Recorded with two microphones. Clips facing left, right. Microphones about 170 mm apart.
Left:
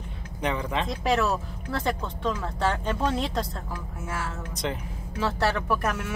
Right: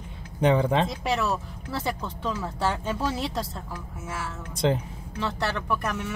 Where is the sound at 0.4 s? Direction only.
30° right (ahead or behind).